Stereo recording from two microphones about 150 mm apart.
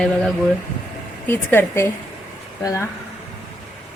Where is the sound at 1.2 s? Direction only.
15° left (ahead or behind).